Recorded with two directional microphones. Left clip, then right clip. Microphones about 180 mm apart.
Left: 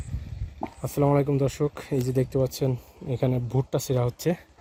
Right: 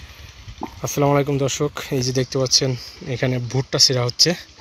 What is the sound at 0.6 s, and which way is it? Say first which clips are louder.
Speech: right 5 dB; centre (ahead or behind).